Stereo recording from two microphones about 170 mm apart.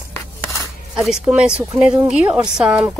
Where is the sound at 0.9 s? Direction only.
5° right (ahead or behind).